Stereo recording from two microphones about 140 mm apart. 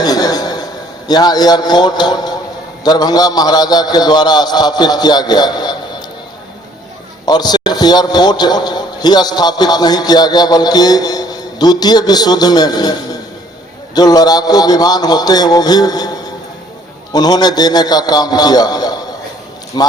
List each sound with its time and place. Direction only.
0.0 s a sound: 25° left (ahead or behind)
1.0 s a man's voice: 30° left (ahead or behind)
7.3 s a man's voice: 30° left (ahead or behind)